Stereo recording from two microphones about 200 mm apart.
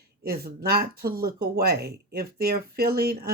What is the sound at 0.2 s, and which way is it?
Speech, 50° right (ahead or behind).